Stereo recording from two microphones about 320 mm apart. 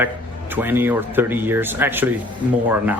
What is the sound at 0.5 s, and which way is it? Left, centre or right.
Speech, centre.